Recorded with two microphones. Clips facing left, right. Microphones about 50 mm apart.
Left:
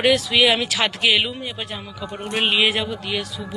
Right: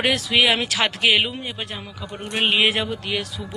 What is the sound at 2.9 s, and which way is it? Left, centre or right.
Speech, right.